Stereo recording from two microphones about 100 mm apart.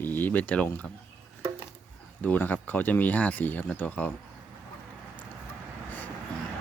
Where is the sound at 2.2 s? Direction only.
15° left (ahead or behind).